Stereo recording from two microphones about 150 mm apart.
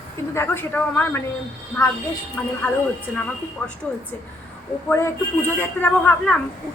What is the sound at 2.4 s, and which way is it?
Speech, 15° left (ahead or behind).